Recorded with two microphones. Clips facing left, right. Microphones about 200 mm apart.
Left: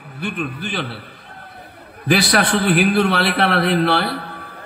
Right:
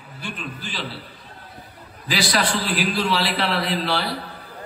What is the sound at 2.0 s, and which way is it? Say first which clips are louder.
A man's voice: left 6 dB; 60° left (ahead or behind).